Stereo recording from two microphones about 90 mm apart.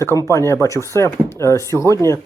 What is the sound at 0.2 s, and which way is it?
Speech, 35° left (ahead or behind).